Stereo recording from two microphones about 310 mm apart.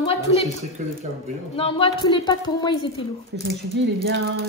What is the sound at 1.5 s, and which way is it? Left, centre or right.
A woman's voice, centre.